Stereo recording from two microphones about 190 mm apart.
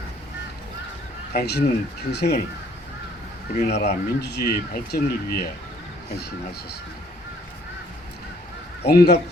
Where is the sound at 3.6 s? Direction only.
60° left (ahead or behind).